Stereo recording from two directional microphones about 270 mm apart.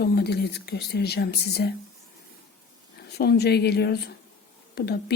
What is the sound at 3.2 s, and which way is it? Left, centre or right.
Speech, left.